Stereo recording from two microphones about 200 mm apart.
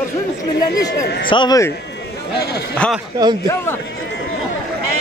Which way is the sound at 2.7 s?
5° left (ahead or behind).